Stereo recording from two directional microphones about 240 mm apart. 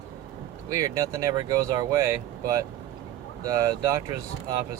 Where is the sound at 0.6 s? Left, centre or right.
Centre.